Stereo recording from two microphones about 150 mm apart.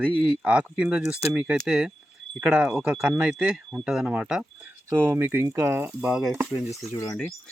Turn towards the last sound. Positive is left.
turn(degrees=20)  # may be behind; listen again after turning